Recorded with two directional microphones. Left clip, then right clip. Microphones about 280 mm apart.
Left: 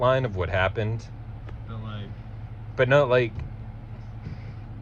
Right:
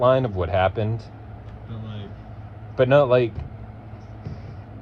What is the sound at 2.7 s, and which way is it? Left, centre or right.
Speech, left.